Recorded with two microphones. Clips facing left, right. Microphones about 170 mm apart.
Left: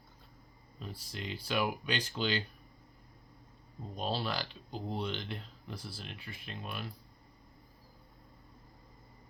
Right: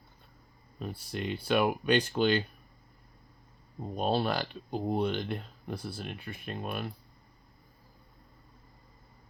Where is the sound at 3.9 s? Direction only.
55° right (ahead or behind).